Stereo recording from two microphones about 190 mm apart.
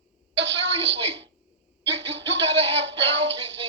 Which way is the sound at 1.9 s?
65° right (ahead or behind).